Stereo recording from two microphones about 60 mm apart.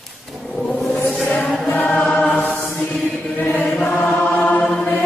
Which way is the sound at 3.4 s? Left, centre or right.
Left.